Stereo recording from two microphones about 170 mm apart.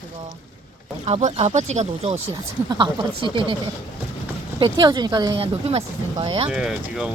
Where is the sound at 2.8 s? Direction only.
30° right (ahead or behind).